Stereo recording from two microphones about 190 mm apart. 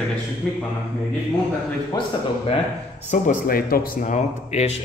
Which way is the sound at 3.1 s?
40° left (ahead or behind).